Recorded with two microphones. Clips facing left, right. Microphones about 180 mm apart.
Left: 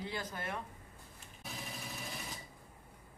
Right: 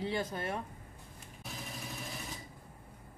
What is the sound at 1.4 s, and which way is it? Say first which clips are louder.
Sewing machine: right 1 dB; centre (ahead or behind).